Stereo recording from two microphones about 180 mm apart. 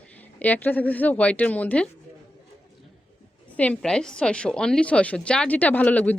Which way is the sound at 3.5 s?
5° left (ahead or behind).